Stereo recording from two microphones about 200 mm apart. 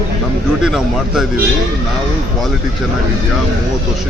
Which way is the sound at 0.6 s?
Centre (ahead or behind).